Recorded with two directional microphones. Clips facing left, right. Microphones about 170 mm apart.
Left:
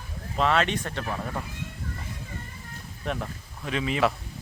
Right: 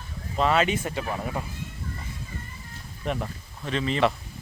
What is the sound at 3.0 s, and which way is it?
Speech, centre (ahead or behind).